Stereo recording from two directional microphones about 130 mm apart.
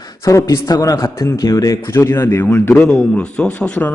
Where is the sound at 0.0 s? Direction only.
25° left (ahead or behind).